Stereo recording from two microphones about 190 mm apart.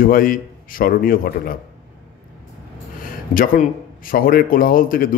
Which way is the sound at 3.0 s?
45° left (ahead or behind).